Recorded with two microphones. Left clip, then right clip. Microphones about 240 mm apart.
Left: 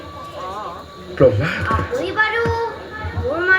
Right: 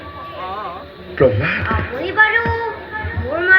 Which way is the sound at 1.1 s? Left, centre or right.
Left.